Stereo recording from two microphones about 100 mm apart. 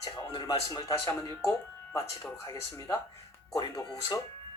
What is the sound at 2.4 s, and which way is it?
Speech, 30° left (ahead or behind).